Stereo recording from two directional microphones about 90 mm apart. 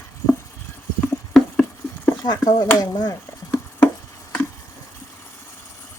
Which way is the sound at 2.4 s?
45° left (ahead or behind).